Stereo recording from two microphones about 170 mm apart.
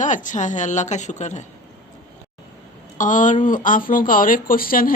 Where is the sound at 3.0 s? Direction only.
50° left (ahead or behind).